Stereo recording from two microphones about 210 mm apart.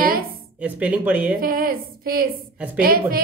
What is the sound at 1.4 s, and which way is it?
Speech, 45° right (ahead or behind).